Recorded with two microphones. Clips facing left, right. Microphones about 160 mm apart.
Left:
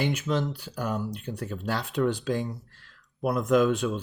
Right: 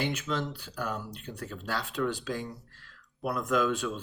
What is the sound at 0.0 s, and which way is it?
Speech, 15° left (ahead or behind).